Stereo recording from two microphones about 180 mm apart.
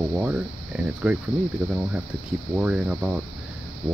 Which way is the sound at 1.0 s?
5° right (ahead or behind).